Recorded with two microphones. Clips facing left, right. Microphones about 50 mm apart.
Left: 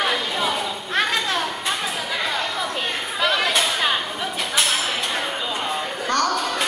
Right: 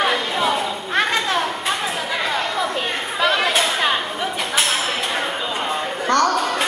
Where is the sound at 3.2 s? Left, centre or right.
Centre.